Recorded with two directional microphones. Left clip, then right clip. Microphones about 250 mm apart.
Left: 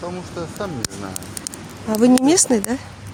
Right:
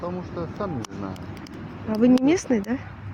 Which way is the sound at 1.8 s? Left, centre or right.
Left.